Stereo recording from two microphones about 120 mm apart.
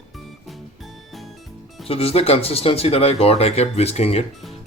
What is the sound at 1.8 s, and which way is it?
Speech, 55° left (ahead or behind).